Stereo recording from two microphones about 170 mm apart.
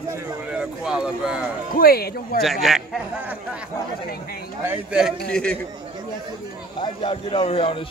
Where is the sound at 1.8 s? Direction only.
65° left (ahead or behind).